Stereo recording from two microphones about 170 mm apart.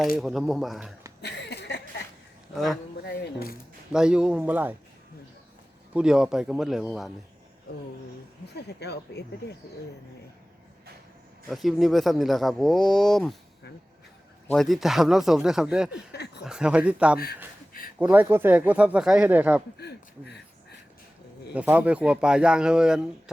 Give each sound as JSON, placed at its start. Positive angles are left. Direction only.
{"t": 0.2, "sound": "speech", "side_deg": 0}
{"t": 1.2, "sound": "a sound", "side_deg": 80}
{"t": 3.0, "sound": "speech", "side_deg": 75}
{"t": 3.9, "sound": "speech", "side_deg": -5}
{"t": 5.9, "sound": "speech", "side_deg": -5}
{"t": 8.5, "sound": "speech", "side_deg": 75}
{"t": 11.4, "sound": "speech", "side_deg": 0}
{"t": 14.5, "sound": "speech", "side_deg": 0}
{"t": 16.1, "sound": "speech", "side_deg": 75}
{"t": 16.4, "sound": "speech", "side_deg": -5}
{"t": 19.8, "sound": "a sound", "side_deg": 80}
{"t": 21.5, "sound": "speech", "side_deg": -10}